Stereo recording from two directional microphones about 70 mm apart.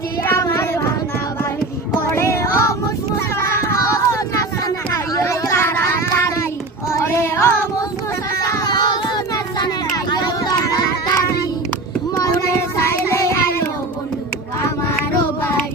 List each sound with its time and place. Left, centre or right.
0.3 s child singing: left
2.0 s music: left
3.3 s a sound: left
6.9 s music: left
8.4 s child singing: left
8.6 s child singing: left
12.2 s child singing: left